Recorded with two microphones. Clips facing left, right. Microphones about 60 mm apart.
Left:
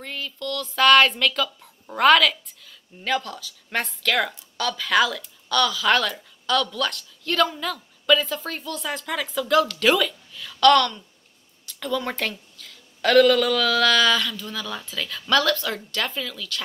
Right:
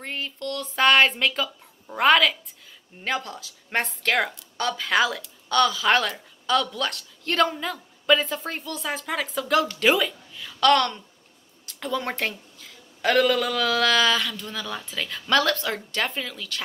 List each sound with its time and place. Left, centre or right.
0.0 s a woman's voice: right
14.3 s speech: right